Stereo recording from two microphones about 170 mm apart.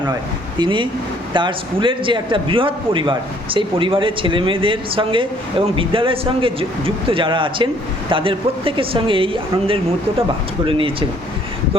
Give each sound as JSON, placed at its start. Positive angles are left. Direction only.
{"t": 0.6, "sound": "a man's voice", "side_deg": -30}